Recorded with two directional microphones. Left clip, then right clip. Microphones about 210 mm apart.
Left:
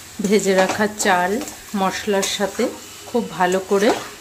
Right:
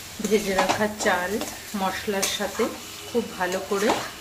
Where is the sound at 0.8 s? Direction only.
55° left (ahead or behind).